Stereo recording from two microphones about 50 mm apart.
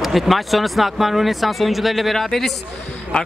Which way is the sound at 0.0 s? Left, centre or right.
Centre.